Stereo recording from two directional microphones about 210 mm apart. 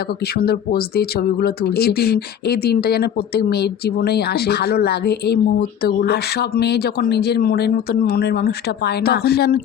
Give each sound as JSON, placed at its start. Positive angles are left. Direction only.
{"t": 0.3, "sound": "speech", "side_deg": 50}